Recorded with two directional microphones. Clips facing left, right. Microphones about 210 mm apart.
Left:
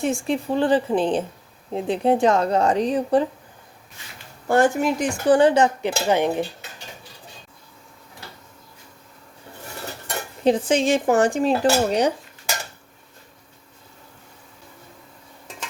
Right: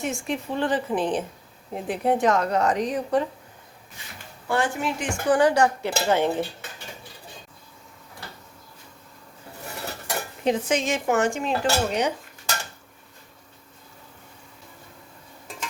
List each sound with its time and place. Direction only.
0.0 s dishes: 30° left (ahead or behind)
1.7 s speech: 25° left (ahead or behind)
4.4 s speech: 45° left (ahead or behind); by 6.4 s 15° left (ahead or behind)
10.4 s dishes: 30° left (ahead or behind)